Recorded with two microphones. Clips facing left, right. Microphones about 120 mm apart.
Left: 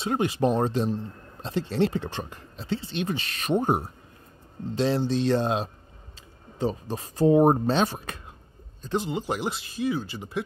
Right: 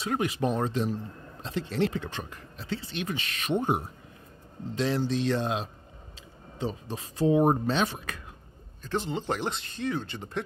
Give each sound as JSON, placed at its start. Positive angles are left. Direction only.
{"t": 0.0, "sound": "speech", "side_deg": 30}
{"t": 8.8, "sound": "speech", "side_deg": 15}